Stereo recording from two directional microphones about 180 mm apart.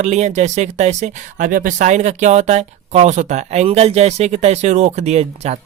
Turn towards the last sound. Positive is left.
turn(degrees=-35)  # may be behind; listen again after turning